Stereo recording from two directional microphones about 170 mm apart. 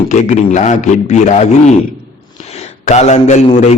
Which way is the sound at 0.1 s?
45° left (ahead or behind).